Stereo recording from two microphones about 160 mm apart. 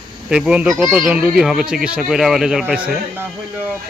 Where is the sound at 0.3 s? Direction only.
5° right (ahead or behind).